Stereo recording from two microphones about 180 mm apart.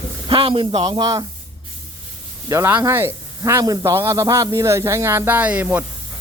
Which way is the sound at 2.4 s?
15° right (ahead or behind).